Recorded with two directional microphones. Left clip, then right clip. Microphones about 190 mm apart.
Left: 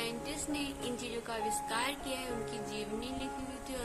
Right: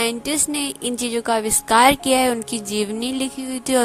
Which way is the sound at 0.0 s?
60° right (ahead or behind).